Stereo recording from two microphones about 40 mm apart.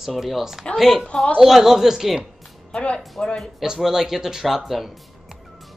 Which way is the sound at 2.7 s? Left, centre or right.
Left.